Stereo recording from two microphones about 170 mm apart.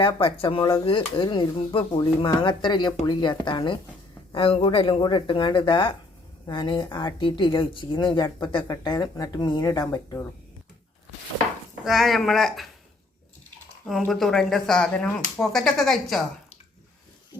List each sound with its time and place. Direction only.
0.0 s a woman's voice: 30° left (ahead or behind)
11.9 s speech: centre (ahead or behind)
13.8 s speech: centre (ahead or behind)